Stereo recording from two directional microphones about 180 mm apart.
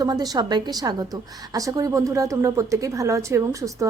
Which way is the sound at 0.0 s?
20° right (ahead or behind).